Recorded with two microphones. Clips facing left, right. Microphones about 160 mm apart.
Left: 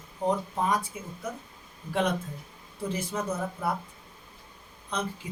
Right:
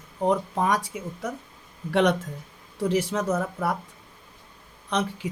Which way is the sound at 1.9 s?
75° right (ahead or behind).